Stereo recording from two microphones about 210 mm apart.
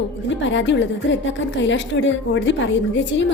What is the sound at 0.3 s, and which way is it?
A woman's voice, 60° left (ahead or behind).